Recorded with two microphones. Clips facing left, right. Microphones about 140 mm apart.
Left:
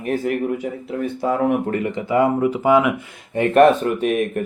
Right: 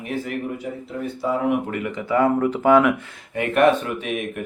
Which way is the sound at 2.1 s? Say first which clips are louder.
Left 1 dB; 15° left (ahead or behind).